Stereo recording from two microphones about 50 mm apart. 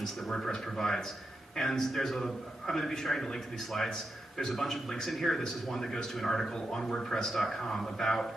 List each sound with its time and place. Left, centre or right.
0.0 s a man's voice: centre